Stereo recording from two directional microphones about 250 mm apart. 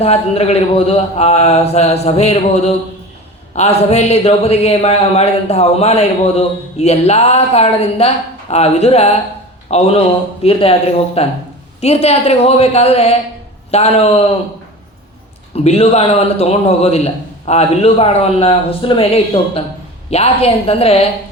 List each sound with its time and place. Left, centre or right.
0.0 s speech: left
15.5 s speech: left